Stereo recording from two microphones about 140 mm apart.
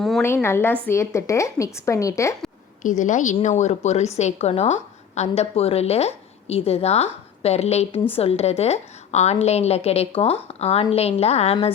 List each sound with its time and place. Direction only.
0.4 s a woman's voice: 15° left (ahead or behind)
2.8 s a woman's voice: 65° left (ahead or behind)